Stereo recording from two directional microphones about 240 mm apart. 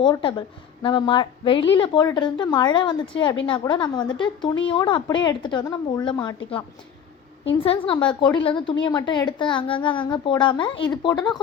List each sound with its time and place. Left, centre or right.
0.0 s a woman's voice: left
7.6 s a woman's voice: left